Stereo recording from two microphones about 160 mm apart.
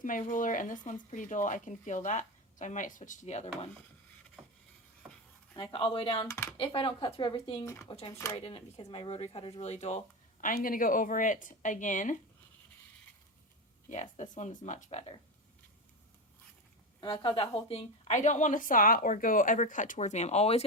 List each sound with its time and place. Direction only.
0.0 s a woman's voice: 55° left (ahead or behind)
5.5 s speech: 30° left (ahead or behind)
6.2 s speech: 15° left (ahead or behind)
6.6 s speech: 35° left (ahead or behind)
7.6 s speech: 20° left (ahead or behind)
7.9 s speech: 30° left (ahead or behind)
10.4 s speech: 60° left (ahead or behind)
13.9 s a woman's voice: 45° left (ahead or behind)
17.0 s a woman's voice: 30° left (ahead or behind)